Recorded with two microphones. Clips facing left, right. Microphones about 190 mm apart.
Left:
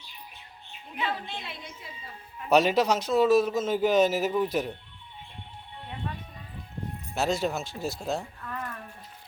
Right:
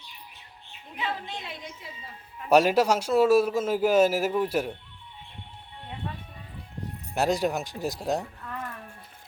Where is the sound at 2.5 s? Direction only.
10° right (ahead or behind).